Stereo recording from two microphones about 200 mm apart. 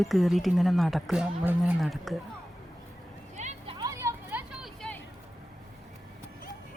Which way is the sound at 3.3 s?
35° right (ahead or behind).